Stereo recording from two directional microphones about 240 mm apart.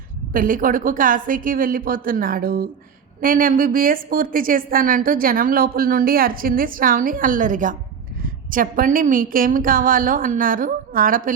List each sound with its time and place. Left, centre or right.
0.3 s a woman's voice: right